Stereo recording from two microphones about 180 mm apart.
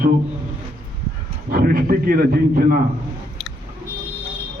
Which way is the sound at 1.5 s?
55° right (ahead or behind).